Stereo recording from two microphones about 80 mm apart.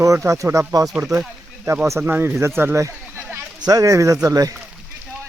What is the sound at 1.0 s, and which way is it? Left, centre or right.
Speech, right.